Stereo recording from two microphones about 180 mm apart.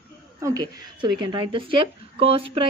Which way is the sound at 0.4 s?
20° right (ahead or behind).